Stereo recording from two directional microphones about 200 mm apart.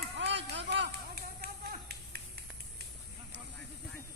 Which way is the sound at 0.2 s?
60° right (ahead or behind).